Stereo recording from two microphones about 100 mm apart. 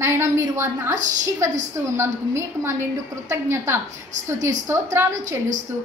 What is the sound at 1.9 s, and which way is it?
A woman's voice, 25° right (ahead or behind).